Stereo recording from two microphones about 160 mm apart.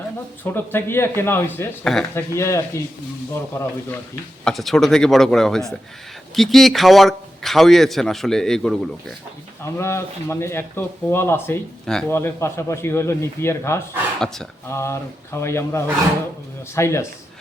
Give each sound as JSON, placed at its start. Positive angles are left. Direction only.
{"t": 0.4, "sound": "speech", "side_deg": 15}
{"t": 4.4, "sound": "a man's voice", "side_deg": 0}
{"t": 9.7, "sound": "speech", "side_deg": 15}
{"t": 11.9, "sound": "a man's voice", "side_deg": 5}
{"t": 12.1, "sound": "speech", "side_deg": 15}